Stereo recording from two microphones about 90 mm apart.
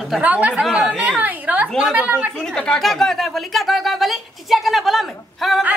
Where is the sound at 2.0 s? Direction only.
20° right (ahead or behind).